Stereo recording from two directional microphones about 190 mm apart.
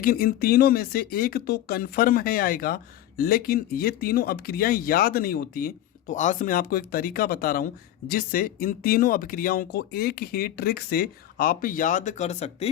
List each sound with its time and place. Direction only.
0.0 s speech: 50° left (ahead or behind)